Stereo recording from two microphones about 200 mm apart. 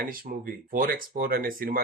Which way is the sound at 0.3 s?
40° right (ahead or behind).